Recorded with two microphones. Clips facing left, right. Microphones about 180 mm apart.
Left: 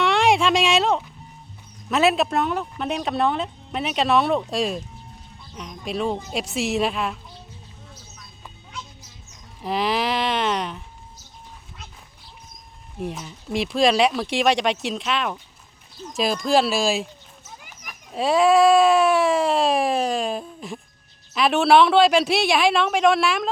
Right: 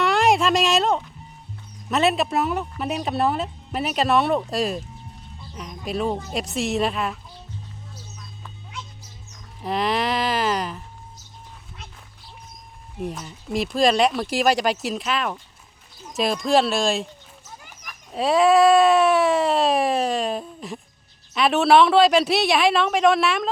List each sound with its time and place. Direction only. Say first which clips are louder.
0.0 s music: even; centre (ahead or behind)
1.9 s speech: left 1 dB; centre (ahead or behind)
9.6 s music: even; centre (ahead or behind)
13.0 s speech: even; centre (ahead or behind)